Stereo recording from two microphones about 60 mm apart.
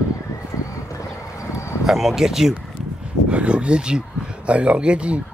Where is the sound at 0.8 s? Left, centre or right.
Left.